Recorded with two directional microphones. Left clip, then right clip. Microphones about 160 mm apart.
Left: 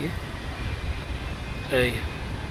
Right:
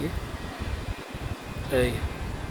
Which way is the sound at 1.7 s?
10° right (ahead or behind).